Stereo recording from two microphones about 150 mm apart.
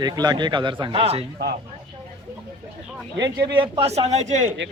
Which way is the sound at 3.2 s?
30° right (ahead or behind).